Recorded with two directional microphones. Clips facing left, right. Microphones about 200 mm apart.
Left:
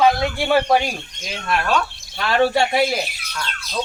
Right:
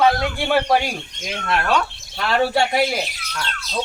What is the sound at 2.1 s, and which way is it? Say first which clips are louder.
Speech: left 1 dB; centre (ahead or behind).